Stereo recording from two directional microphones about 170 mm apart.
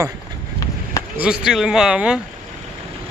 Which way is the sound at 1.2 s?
5° right (ahead or behind).